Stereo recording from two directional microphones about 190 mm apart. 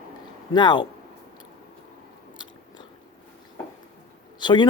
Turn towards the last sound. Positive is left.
turn(degrees=25)  # may be behind; listen again after turning